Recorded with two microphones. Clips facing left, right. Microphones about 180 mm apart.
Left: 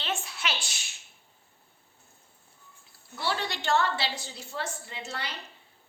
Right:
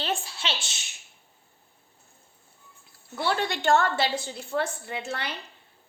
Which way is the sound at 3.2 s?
55° right (ahead or behind).